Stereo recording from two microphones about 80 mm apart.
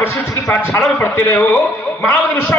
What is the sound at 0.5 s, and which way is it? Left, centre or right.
Speech, left.